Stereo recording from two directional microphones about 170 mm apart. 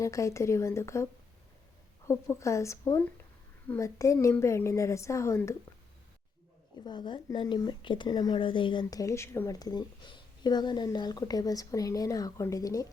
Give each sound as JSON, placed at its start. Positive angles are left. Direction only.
{"t": 0.0, "sound": "a woman's voice", "side_deg": 20}
{"t": 2.0, "sound": "a woman's voice", "side_deg": 15}
{"t": 6.8, "sound": "a woman's voice", "side_deg": 25}